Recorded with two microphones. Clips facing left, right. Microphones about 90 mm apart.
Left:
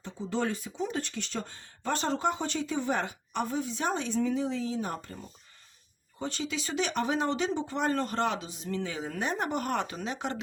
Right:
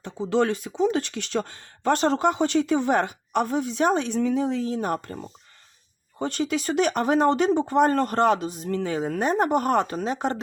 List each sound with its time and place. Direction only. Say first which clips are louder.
0.0 s speech: right 9 dB; 75° right (ahead or behind); by 10.4 s 40° right (ahead or behind)